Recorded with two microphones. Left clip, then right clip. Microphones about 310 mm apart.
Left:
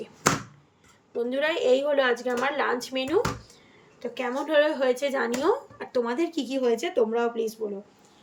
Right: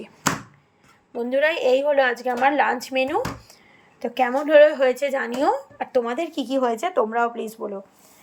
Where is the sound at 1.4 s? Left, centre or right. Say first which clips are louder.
Right 4 dB; centre.